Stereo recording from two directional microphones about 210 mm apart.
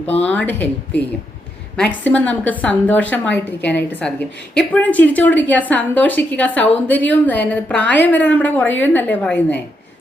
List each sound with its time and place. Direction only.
0.3 s a woman's voice: 10° left (ahead or behind)